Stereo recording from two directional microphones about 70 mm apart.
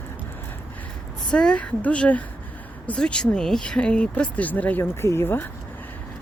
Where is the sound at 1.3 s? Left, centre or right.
Centre.